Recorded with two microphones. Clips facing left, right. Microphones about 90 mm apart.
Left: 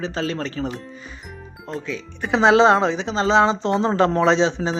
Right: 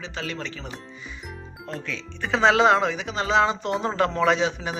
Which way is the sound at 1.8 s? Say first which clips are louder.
Left 3 dB; 20° left (ahead or behind).